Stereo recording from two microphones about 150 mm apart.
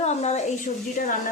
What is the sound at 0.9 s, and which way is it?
Speech, 65° left (ahead or behind).